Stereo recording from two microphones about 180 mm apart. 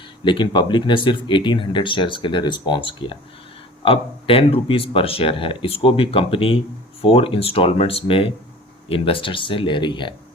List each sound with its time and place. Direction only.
0.3 s speech: 25° left (ahead or behind)